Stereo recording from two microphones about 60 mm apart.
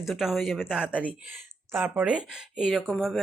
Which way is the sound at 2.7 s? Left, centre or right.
Centre.